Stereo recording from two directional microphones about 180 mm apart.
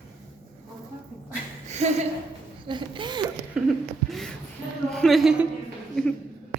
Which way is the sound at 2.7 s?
25° right (ahead or behind).